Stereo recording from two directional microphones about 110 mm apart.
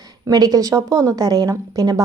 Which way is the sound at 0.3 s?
35° right (ahead or behind).